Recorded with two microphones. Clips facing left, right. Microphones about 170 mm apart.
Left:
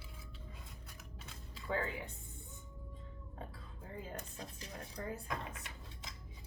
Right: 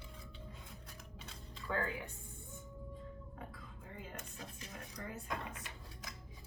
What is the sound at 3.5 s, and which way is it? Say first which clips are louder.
Dishes: left 2 dB; 30° left (ahead or behind).